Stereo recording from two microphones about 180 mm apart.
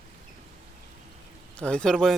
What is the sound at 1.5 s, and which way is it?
Speech, 5° left (ahead or behind).